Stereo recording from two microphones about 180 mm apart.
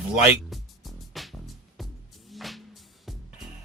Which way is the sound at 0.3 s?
Centre (ahead or behind).